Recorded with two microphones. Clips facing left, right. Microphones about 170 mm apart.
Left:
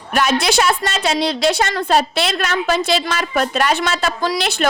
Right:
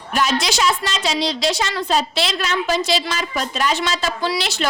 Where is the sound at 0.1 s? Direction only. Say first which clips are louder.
Left 3 dB; 60° left (ahead or behind).